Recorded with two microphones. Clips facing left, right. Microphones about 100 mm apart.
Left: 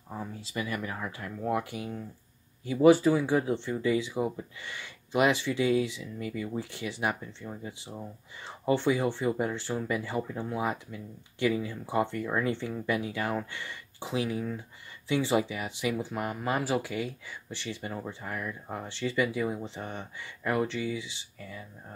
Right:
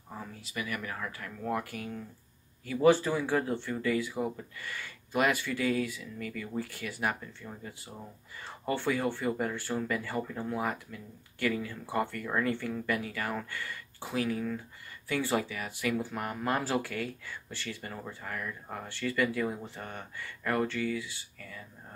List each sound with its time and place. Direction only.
0.4 s speech: 30° left (ahead or behind)